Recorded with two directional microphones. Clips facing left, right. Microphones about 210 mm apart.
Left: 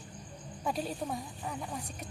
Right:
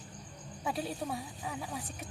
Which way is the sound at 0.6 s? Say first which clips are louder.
Left 1 dB; 5° right (ahead or behind).